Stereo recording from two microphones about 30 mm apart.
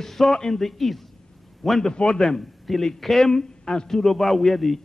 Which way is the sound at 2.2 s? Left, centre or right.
Centre.